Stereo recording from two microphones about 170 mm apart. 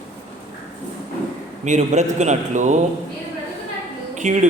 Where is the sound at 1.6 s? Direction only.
45° right (ahead or behind).